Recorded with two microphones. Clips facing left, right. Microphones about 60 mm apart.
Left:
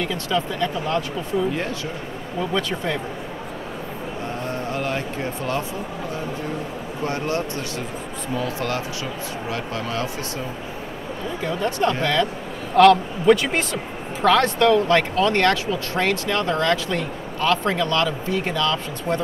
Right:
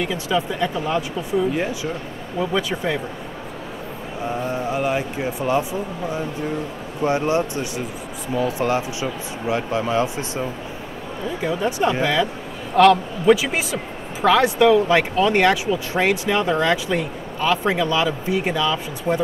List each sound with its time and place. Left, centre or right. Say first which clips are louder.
0.0 s speech: right 1 dB; centre
4.4 s speech: right 4 dB; centre
7.0 s speech: right 5 dB; centre
11.4 s a man's voice: right 1 dB; centre